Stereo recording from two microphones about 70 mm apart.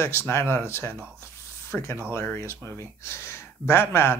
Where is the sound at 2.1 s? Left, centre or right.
Left.